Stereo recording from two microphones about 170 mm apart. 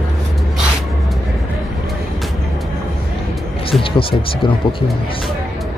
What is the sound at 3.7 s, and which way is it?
Speech, 30° left (ahead or behind).